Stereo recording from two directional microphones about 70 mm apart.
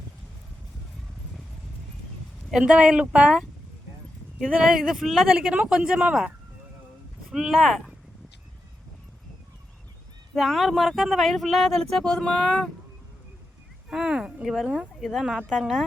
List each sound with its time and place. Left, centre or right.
2.5 s speech: centre
4.4 s speech: centre
5.0 s speech: centre
5.5 s speech: centre
7.3 s speech: centre
10.3 s speech: centre
13.9 s speech: centre